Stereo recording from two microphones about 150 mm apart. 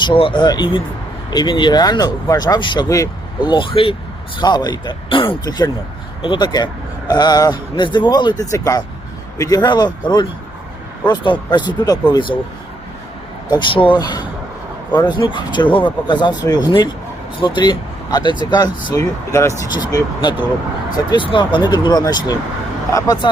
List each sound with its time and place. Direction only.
0.0 s speech: 35° left (ahead or behind)
13.5 s speech: 35° left (ahead or behind)
18.9 s speech: 20° left (ahead or behind)